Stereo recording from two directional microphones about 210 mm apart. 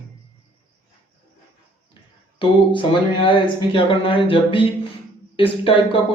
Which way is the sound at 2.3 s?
25° left (ahead or behind).